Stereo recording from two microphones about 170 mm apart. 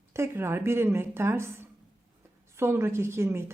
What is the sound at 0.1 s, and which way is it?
A woman's voice, 15° right (ahead or behind).